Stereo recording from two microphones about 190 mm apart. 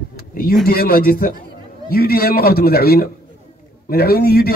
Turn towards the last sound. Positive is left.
turn(degrees=55)  # may be behind; listen again after turning